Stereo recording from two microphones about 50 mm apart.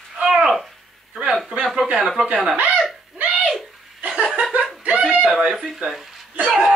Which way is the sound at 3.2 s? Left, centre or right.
Right.